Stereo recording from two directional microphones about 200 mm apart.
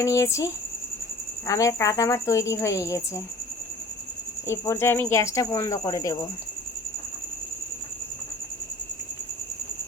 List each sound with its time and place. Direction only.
0.0 s speech: 15° left (ahead or behind)
4.4 s speech: 15° left (ahead or behind)